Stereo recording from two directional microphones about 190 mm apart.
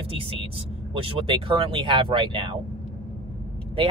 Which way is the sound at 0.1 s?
30° right (ahead or behind).